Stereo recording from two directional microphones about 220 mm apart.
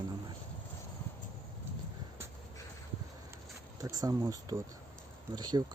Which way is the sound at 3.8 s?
15° right (ahead or behind).